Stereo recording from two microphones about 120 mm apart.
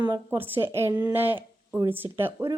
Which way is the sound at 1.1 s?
15° right (ahead or behind).